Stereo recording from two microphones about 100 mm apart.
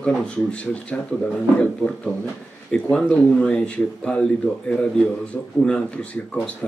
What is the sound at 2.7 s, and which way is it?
Speech, 10° left (ahead or behind).